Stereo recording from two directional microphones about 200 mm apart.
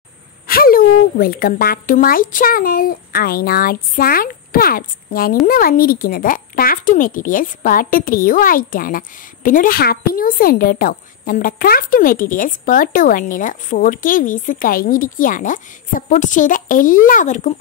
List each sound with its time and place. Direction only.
0.5 s speech: 45° left (ahead or behind)